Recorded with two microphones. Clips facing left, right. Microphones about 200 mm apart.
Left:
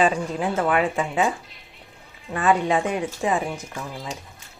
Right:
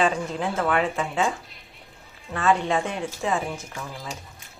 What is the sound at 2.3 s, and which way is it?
Speech, 15° left (ahead or behind).